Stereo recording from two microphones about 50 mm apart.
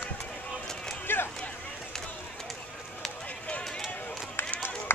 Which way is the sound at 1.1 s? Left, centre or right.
Left.